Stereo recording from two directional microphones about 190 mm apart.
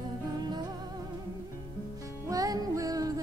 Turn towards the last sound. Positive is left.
turn(degrees=-20)  # may be behind; listen again after turning